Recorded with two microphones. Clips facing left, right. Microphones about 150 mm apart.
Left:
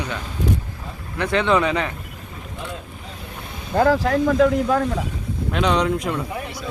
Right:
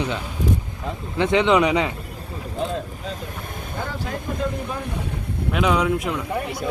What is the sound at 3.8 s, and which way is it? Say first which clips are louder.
Speech: left 14 dB; 90° left.